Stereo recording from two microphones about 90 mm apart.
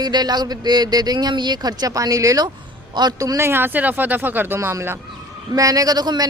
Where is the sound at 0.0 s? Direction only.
50° right (ahead or behind).